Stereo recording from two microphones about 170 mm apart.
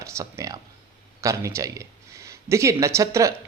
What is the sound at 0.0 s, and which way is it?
Speech, 15° right (ahead or behind).